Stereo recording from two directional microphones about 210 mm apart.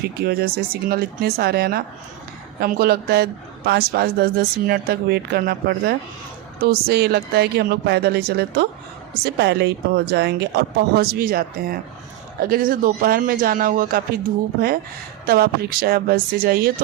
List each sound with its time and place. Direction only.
0.3 s speech: 45° right (ahead or behind)
15.3 s speech: 45° right (ahead or behind)